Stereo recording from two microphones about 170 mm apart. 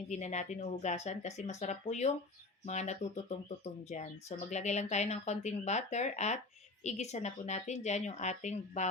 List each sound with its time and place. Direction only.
0.1 s speech: 45° left (ahead or behind)